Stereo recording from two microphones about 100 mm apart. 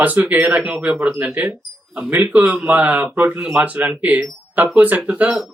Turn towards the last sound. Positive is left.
turn(degrees=-5)  # may be behind; listen again after turning